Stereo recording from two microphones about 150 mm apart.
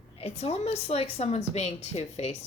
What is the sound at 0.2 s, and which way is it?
A woman's voice, 45° left (ahead or behind).